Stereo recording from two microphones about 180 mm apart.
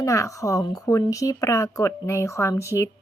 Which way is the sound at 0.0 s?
15° left (ahead or behind).